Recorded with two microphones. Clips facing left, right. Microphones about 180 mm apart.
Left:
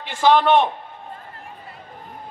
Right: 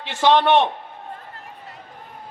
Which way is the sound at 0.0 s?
80° right.